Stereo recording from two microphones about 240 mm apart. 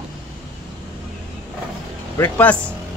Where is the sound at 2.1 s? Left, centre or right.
Centre.